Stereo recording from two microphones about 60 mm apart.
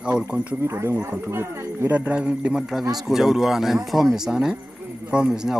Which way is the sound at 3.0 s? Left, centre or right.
Centre.